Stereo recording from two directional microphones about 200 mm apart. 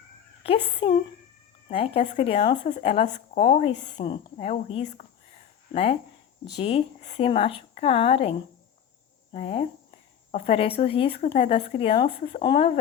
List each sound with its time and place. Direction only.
0.4 s speech: 30° left (ahead or behind)